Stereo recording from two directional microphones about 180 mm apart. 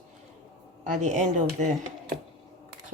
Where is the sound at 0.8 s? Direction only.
45° right (ahead or behind).